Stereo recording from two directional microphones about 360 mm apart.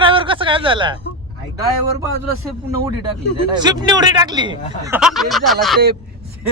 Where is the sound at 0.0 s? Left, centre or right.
Centre.